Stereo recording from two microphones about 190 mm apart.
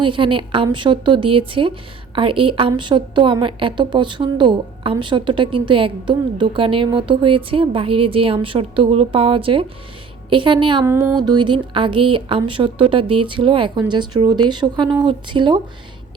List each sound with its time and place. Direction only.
0.0 s a woman's voice: 25° right (ahead or behind)
10.8 s music: 15° right (ahead or behind)
11.2 s a woman's voice: 25° right (ahead or behind)